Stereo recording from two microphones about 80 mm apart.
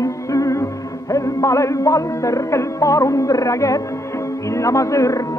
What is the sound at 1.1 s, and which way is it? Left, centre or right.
Speech, left.